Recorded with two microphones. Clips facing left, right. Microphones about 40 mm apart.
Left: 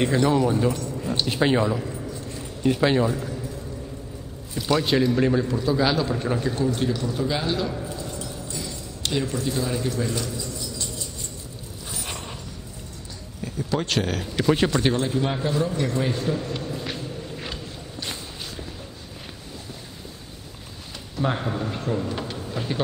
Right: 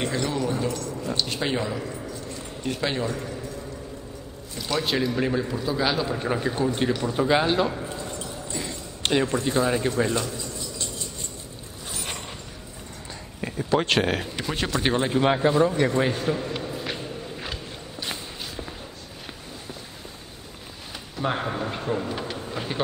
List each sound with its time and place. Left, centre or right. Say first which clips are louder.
0.0 s speech: left 6 dB; centre
1.7 s a man's voice: left 3 dB; centre
4.6 s a man's voice: left 4 dB; centre; by 7.7 s right
7.7 s keys jangling: even; right
13.6 s speech: right 3 dB; right
14.2 s a man's voice: left 6 dB; centre
14.5 s speech: left 7 dB; centre
14.8 s a man's voice: left 1 dB; centre
15.0 s a man's voice: right 4 dB; right
15.9 s a man's voice: right 1 dB; centre
21.2 s a man's voice: left 1 dB; centre
22.1 s a sound: left 1 dB; centre